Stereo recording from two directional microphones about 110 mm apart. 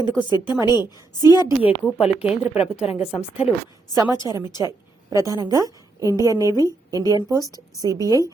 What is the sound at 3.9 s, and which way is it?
A woman's voice, 30° right (ahead or behind).